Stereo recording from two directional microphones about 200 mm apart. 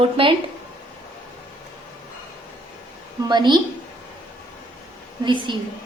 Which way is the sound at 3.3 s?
20° right (ahead or behind).